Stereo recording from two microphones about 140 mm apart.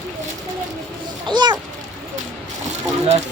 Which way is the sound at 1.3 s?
30° right (ahead or behind).